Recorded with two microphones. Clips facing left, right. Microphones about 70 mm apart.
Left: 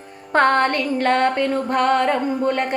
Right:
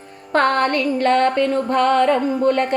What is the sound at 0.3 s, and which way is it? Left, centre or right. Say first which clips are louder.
A woman's voice: even; left.